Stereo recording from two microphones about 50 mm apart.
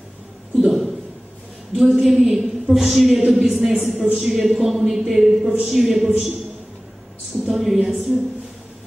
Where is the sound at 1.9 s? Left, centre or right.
Centre.